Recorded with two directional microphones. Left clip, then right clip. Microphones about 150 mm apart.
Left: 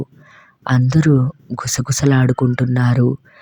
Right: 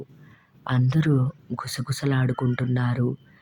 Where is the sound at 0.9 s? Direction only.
30° left (ahead or behind).